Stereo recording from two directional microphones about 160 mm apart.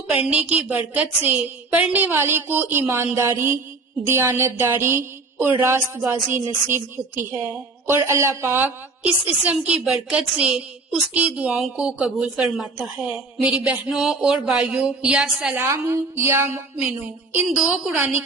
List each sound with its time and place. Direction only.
0.3 s a woman's voice: 10° right (ahead or behind)
15.6 s a woman's voice: 15° right (ahead or behind)
17.6 s a woman's voice: 5° right (ahead or behind)